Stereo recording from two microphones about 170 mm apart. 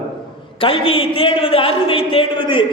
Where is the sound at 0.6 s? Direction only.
35° left (ahead or behind).